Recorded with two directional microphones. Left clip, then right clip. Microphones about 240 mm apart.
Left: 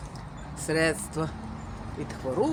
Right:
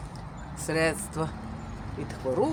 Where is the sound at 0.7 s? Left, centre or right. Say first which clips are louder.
Left 1 dB; centre.